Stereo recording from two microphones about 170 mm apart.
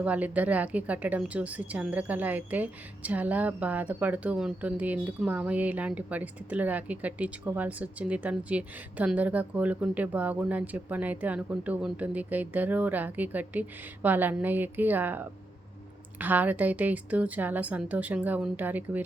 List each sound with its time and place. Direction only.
0.0 s a woman's voice: 10° right (ahead or behind)